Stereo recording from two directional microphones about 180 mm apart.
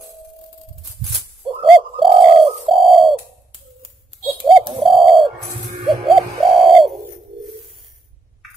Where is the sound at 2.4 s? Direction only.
Centre (ahead or behind).